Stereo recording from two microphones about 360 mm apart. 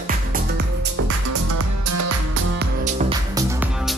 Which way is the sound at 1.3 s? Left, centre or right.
Right.